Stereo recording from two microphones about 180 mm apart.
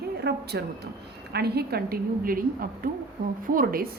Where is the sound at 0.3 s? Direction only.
65° right (ahead or behind).